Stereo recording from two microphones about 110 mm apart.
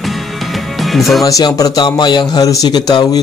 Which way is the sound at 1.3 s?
35° left (ahead or behind).